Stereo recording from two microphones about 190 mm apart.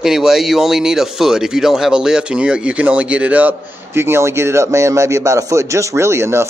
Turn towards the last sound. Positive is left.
turn(degrees=-15)  # may be behind; listen again after turning